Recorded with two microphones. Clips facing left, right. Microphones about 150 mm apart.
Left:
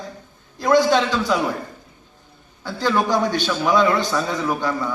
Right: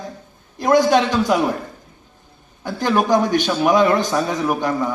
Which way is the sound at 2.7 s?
20° right (ahead or behind).